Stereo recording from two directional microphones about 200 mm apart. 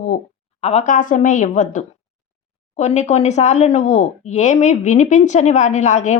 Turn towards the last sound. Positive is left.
turn(degrees=35)  # may be behind; listen again after turning